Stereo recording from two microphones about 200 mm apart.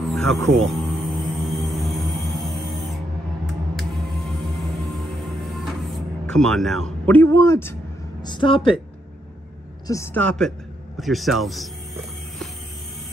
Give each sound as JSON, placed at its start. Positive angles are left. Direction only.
{"t": 0.0, "sound": "speech", "side_deg": 0}
{"t": 1.0, "sound": "music", "side_deg": 0}
{"t": 5.2, "sound": "music", "side_deg": 0}
{"t": 8.2, "sound": "speech", "side_deg": 25}
{"t": 9.8, "sound": "speech", "side_deg": 15}